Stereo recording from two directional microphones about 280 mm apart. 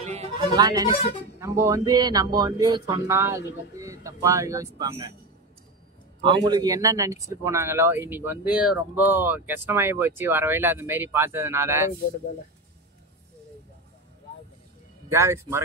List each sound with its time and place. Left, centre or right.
0.0 s speech: right
6.2 s speech: centre
15.0 s speech: centre